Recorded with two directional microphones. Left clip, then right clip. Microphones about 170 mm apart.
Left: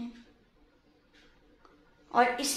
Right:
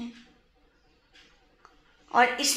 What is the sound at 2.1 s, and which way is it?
Speech, 45° right (ahead or behind).